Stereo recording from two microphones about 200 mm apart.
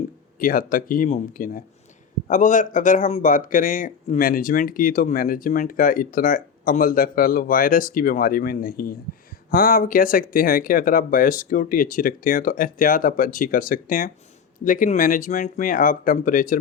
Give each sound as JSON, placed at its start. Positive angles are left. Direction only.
{"t": 0.3, "sound": "speech", "side_deg": 45}